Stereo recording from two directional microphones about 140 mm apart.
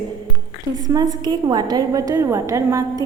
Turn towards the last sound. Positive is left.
turn(degrees=-20)  # may be behind; listen again after turning